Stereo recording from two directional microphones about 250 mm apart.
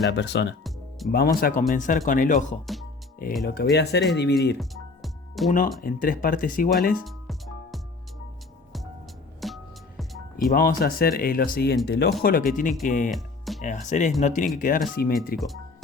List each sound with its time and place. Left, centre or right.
0.1 s speech: left
0.6 s music: centre
1.1 s speech: left
4.7 s music: centre
5.5 s speech: left
7.0 s music: centre
9.4 s music: centre
10.3 s speech: left
13.1 s music: centre
13.6 s speech: left